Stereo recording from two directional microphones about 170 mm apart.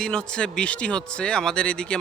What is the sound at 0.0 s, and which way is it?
Speech, 5° left (ahead or behind).